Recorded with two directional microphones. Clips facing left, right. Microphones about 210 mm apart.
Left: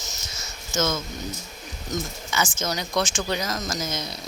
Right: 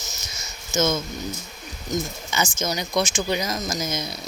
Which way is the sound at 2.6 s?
15° right (ahead or behind).